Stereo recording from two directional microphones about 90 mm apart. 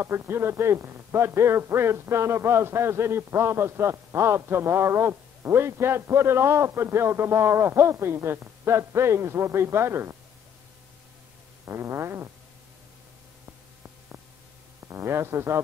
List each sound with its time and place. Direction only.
0.0 s speech: 25° right (ahead or behind)
11.6 s speech: 30° right (ahead or behind)
14.9 s speech: 25° right (ahead or behind)